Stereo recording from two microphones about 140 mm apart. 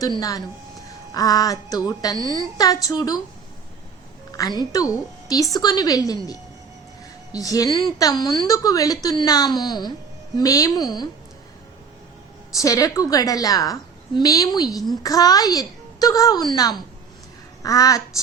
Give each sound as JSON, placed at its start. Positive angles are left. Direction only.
{"t": 0.2, "sound": "a woman's voice", "side_deg": 25}
{"t": 4.3, "sound": "a woman's voice", "side_deg": 25}
{"t": 7.3, "sound": "a woman's voice", "side_deg": 25}
{"t": 12.5, "sound": "a woman's voice", "side_deg": 25}